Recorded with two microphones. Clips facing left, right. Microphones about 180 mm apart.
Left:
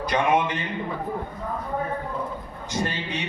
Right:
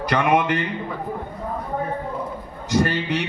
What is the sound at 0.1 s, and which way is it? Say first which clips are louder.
Speech: right 3 dB; 70° right (ahead or behind).